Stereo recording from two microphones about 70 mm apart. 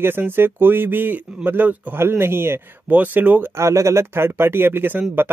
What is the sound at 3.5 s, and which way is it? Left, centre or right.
Speech, right.